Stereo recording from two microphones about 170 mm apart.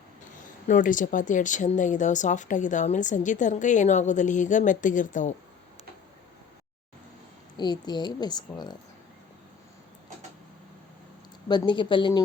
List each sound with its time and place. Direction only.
0.7 s speech: 50° left (ahead or behind)
7.5 s a woman's voice: 25° left (ahead or behind)
11.4 s a woman's voice: 25° left (ahead or behind)